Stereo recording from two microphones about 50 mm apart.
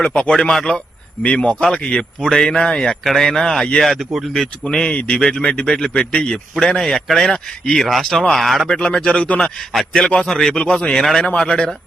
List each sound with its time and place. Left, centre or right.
0.0 s speech: left
4.9 s speech: left; by 8.7 s centre
8.8 s speech: centre